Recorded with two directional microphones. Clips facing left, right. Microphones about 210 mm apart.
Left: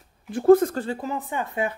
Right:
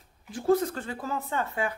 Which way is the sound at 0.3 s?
55° left (ahead or behind).